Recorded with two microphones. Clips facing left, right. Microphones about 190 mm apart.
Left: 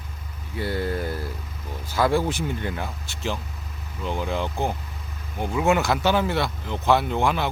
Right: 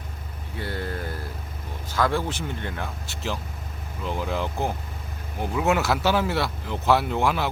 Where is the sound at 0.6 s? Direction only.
10° left (ahead or behind).